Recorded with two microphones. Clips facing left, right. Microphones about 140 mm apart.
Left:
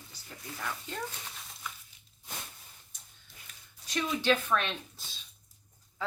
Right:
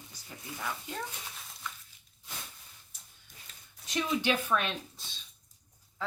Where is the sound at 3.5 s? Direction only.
30° right (ahead or behind).